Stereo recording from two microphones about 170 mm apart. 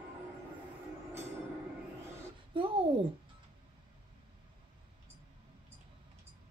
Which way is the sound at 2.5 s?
30° right (ahead or behind).